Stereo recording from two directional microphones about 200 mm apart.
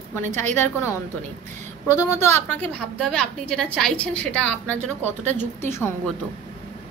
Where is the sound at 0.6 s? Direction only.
10° left (ahead or behind).